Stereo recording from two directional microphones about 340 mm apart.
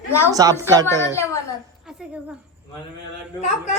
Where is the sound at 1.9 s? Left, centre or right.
Centre.